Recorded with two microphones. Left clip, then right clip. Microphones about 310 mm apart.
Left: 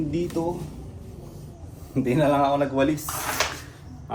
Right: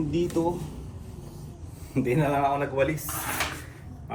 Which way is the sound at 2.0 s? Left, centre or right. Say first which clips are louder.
Left 4 dB; centre.